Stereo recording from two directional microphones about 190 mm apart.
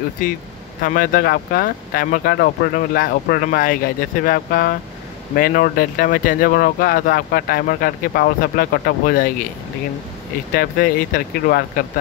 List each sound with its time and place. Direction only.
0.8 s speech: 45° left (ahead or behind)
10.5 s speech: 50° left (ahead or behind)